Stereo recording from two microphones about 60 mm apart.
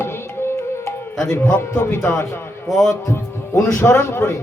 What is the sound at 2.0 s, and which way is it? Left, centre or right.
Speech, left.